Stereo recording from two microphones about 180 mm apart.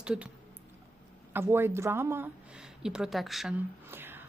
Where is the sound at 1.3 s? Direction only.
10° right (ahead or behind).